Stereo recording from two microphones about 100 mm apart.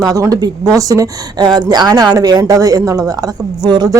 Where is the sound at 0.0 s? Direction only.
35° right (ahead or behind).